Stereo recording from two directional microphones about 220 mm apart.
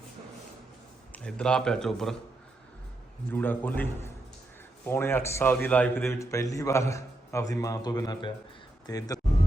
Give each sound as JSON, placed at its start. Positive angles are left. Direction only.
{"t": 1.1, "sound": "speech", "side_deg": 5}
{"t": 3.3, "sound": "a man's voice", "side_deg": 10}